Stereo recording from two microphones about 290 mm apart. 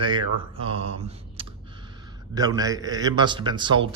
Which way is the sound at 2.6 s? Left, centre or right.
Centre.